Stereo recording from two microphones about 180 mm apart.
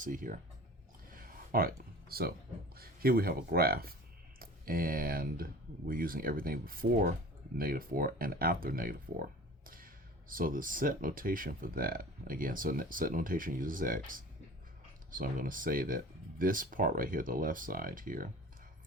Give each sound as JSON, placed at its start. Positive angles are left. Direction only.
{"t": 0.0, "sound": "speech", "side_deg": -50}
{"t": 1.1, "sound": "a sound", "side_deg": -50}
{"t": 2.7, "sound": "speech", "side_deg": -55}